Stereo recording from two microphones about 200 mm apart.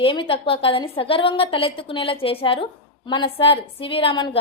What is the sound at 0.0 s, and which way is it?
A woman's voice, 25° left (ahead or behind).